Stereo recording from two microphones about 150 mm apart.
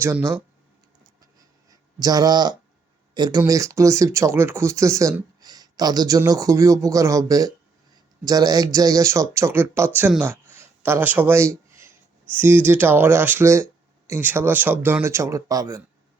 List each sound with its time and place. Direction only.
0.0 s speech: 15° right (ahead or behind)
1.7 s speech: 25° right (ahead or behind)
10.1 s a sound: 10° right (ahead or behind)
12.3 s speech: 15° right (ahead or behind)